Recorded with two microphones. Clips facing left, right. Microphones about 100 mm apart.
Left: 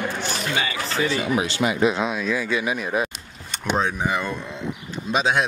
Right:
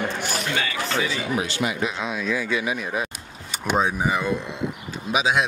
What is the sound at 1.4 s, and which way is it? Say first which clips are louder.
Speech: left 4 dB; 30° left (ahead or behind).